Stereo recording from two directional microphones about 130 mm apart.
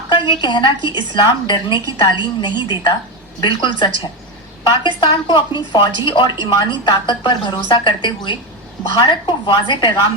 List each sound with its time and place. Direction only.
0.3 s a woman's voice: 35° left (ahead or behind)